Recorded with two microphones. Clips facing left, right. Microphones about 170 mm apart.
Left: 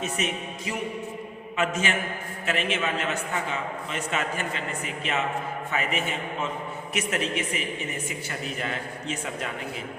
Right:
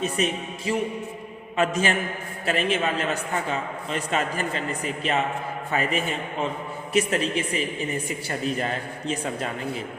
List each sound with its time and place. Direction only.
0.0 s a man's voice: 35° right (ahead or behind)